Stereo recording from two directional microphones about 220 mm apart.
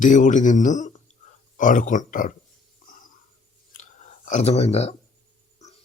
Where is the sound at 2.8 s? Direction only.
40° left (ahead or behind).